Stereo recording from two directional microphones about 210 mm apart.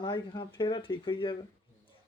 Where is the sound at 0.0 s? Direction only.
20° left (ahead or behind).